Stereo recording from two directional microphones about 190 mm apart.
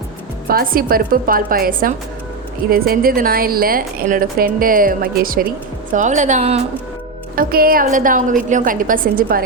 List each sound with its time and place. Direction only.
0.4 s a woman's voice: 50° right (ahead or behind)
7.3 s a woman's voice: 50° right (ahead or behind)